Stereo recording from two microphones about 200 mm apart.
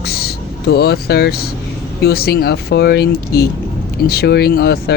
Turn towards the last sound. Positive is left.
turn(degrees=50)  # may be behind; listen again after turning